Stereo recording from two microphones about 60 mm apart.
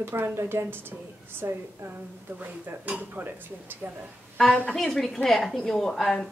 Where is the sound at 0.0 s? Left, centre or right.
Right.